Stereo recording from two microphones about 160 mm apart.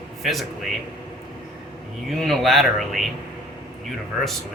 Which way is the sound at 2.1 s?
Centre (ahead or behind).